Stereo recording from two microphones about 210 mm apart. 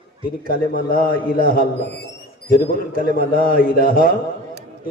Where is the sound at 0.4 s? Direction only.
45° left (ahead or behind).